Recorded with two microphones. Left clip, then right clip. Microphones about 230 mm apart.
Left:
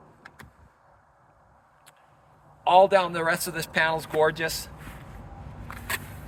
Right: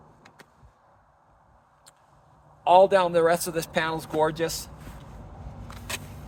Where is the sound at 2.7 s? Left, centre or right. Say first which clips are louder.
Right 1 dB; right.